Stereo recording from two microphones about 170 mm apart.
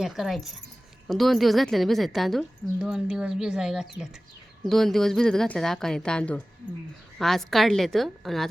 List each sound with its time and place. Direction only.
0.0 s a woman's voice: centre (ahead or behind)